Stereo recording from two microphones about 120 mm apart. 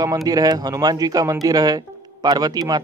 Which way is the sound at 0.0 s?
30° right (ahead or behind).